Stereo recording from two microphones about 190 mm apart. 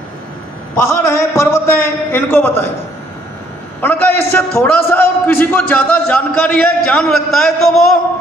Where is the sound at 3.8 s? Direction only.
10° left (ahead or behind).